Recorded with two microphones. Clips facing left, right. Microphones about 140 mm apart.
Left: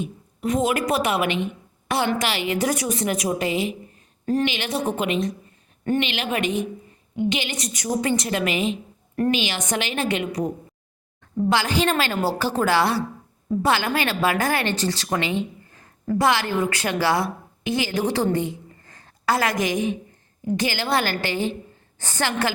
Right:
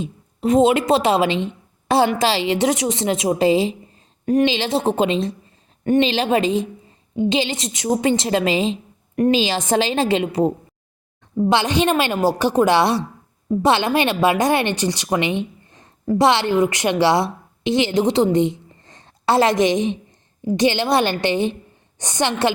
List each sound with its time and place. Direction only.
0.0 s a woman's voice: 25° right (ahead or behind)